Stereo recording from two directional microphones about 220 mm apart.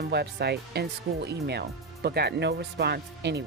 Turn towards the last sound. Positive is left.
turn(degrees=-50)  # may be behind; listen again after turning